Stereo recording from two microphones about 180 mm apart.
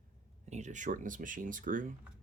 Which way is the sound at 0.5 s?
40° right (ahead or behind).